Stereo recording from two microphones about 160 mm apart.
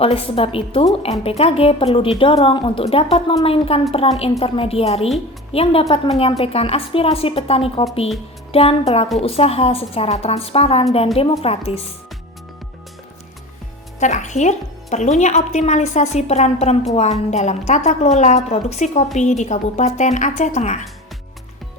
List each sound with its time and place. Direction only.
0.0 s a woman's voice: 35° left (ahead or behind)
14.0 s a woman's voice: 50° left (ahead or behind)